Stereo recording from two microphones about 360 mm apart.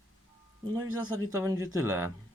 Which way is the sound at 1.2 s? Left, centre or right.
Centre.